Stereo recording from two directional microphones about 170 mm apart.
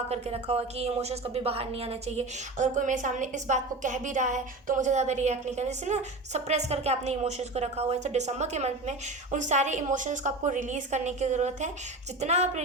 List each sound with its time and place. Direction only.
0.1 s a woman's voice: 40° right (ahead or behind)